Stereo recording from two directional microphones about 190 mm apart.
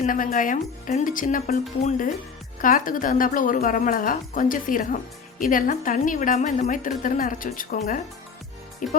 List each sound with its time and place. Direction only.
0.0 s a woman's voice: 45° left (ahead or behind)
2.6 s a woman's voice: 45° left (ahead or behind)